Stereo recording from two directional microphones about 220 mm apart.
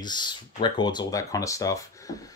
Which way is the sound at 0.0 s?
20° left (ahead or behind).